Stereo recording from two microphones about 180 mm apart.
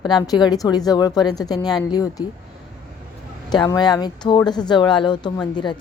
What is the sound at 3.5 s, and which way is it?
A woman's voice, 20° left (ahead or behind).